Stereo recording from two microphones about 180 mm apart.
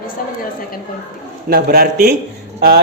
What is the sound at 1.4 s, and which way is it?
A man's voice, 60° right (ahead or behind).